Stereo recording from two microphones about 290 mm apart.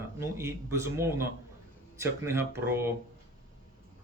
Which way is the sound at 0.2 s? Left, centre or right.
Centre.